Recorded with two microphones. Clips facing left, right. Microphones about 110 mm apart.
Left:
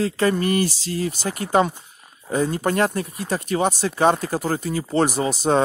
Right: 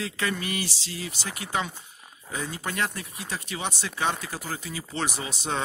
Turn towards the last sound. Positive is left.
turn(degrees=45)  # may be behind; listen again after turning